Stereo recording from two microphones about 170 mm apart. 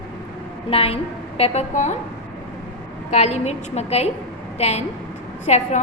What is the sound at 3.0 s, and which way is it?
A woman's voice, 40° left (ahead or behind).